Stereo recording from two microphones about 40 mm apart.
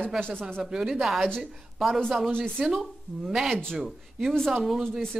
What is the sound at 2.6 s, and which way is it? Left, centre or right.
Speech, centre.